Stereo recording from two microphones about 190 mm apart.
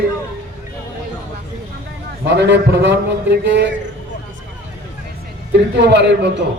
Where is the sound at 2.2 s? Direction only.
65° right (ahead or behind).